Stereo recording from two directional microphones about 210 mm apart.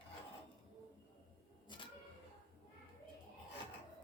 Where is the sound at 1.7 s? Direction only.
20° left (ahead or behind).